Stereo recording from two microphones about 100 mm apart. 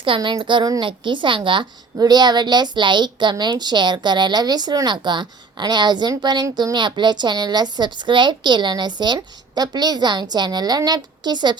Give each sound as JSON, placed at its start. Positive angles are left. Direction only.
{"t": 0.0, "sound": "a woman's voice", "side_deg": -55}
{"t": 2.0, "sound": "a woman's voice", "side_deg": -45}